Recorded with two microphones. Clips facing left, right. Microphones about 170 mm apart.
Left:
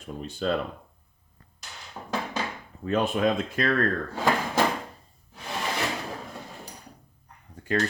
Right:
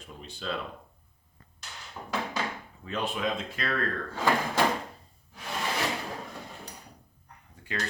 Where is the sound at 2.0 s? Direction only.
25° left (ahead or behind).